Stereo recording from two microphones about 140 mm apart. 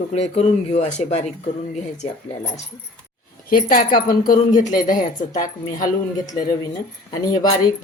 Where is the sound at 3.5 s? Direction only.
90° left; by 5.9 s 65° left (ahead or behind).